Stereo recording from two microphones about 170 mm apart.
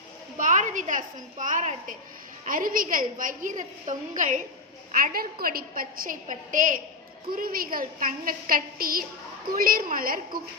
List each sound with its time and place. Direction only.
0.3 s a woman's voice: 50° right (ahead or behind)